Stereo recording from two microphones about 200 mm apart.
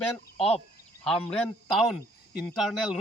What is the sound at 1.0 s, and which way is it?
Speech, 5° left (ahead or behind).